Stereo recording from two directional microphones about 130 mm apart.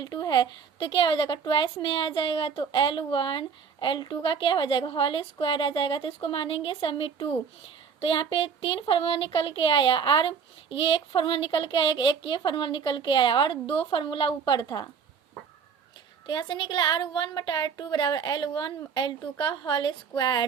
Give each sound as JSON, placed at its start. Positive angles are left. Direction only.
{"t": 0.0, "sound": "speech", "side_deg": 30}
{"t": 16.2, "sound": "speech", "side_deg": 35}